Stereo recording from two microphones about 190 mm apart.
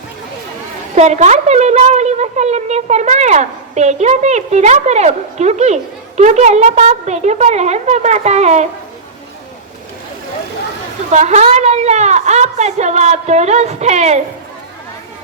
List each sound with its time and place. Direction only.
0.9 s a woman's voice: 35° right (ahead or behind)
11.1 s a woman's voice: 35° right (ahead or behind)